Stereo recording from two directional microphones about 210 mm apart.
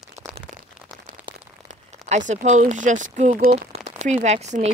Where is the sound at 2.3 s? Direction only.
35° right (ahead or behind).